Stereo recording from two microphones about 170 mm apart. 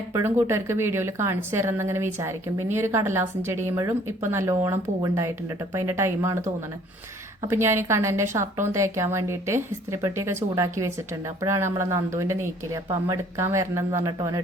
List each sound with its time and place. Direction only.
0.1 s a woman's voice: 15° right (ahead or behind)